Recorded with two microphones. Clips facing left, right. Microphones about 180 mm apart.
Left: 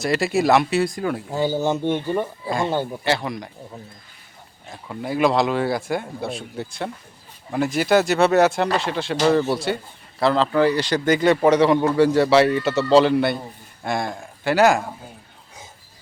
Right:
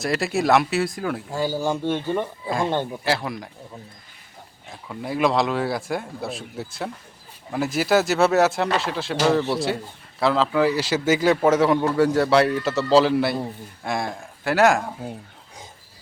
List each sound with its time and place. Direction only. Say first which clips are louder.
0.0 s a man's voice: left 3 dB; centre (ahead or behind)
1.3 s speech: left 3 dB; 20° left (ahead or behind)
2.5 s a man's voice: even; 5° left (ahead or behind)
4.7 s a man's voice: left 2 dB; centre (ahead or behind)